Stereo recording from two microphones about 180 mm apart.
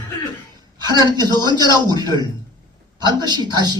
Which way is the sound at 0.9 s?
25° right (ahead or behind).